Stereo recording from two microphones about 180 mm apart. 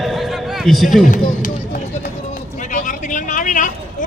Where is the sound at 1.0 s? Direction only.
45° left (ahead or behind).